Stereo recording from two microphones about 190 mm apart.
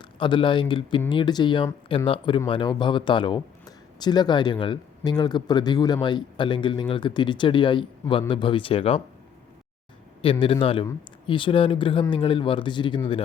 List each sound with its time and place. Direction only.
0.0 s speech: 25° left (ahead or behind)
10.4 s speech: 30° left (ahead or behind)